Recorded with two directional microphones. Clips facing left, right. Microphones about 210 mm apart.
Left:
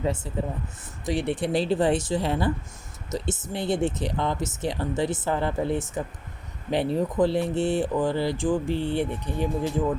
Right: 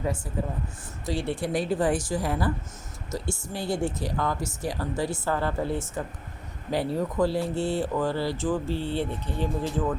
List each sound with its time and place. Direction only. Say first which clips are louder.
0.3 s speech: left 1 dB; 25° left (ahead or behind)